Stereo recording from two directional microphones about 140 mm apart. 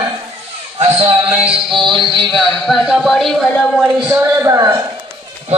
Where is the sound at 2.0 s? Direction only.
35° right (ahead or behind).